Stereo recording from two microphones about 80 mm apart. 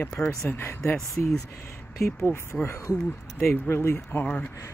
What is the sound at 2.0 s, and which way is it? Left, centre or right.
Speech, left.